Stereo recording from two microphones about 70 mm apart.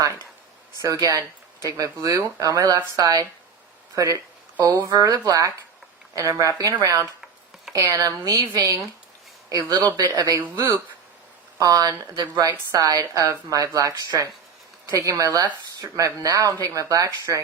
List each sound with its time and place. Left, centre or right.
0.8 s speech: right
4.6 s speech: right
6.1 s speech: right
9.7 s speech: right
11.5 s speech: right